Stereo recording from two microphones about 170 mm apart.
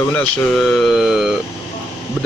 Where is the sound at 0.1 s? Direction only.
5° left (ahead or behind).